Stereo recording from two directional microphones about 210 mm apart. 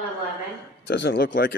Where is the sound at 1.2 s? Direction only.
40° left (ahead or behind).